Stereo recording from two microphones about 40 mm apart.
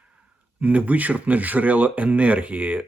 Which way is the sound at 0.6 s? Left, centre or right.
Right.